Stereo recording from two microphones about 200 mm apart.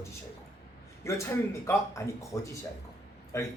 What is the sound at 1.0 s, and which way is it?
A man's voice, 15° left (ahead or behind).